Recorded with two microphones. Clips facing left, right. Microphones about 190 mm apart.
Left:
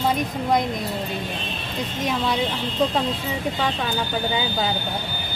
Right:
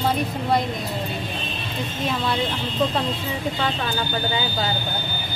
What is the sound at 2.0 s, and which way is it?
Speech, 10° left (ahead or behind).